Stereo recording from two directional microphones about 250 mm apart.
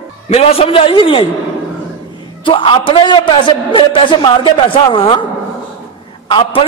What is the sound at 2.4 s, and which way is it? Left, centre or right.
A man's voice, left.